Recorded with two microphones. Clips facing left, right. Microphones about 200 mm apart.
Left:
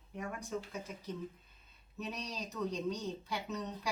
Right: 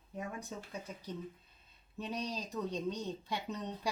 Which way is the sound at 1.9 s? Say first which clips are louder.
Right 3 dB; 30° right (ahead or behind).